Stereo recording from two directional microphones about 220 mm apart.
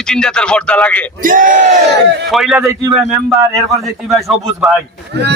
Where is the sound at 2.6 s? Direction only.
10° right (ahead or behind).